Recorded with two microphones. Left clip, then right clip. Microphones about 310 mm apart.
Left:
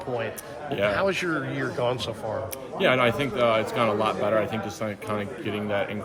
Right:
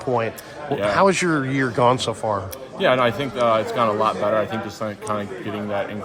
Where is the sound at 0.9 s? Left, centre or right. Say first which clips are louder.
Right 8 dB; right.